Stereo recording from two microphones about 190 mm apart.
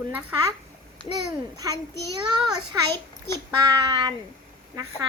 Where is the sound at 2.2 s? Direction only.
20° right (ahead or behind).